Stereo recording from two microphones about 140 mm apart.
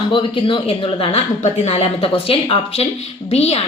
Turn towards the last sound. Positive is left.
turn(degrees=50)  # may be behind; listen again after turning